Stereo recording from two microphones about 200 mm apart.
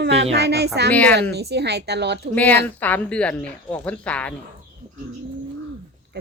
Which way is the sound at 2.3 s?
10° left (ahead or behind).